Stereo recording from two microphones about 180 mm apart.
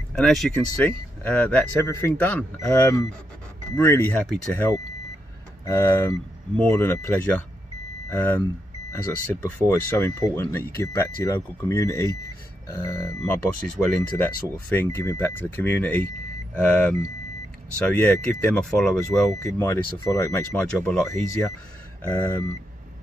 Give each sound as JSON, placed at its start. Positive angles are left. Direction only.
{"t": 0.1, "sound": "speech", "side_deg": 0}
{"t": 19.6, "sound": "speech", "side_deg": 15}
{"t": 20.5, "sound": "speech", "side_deg": 5}